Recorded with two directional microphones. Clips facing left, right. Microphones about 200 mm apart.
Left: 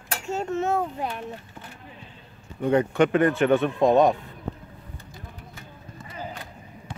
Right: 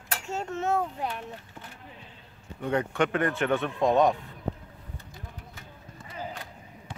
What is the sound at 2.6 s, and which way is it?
Speech, 25° left (ahead or behind).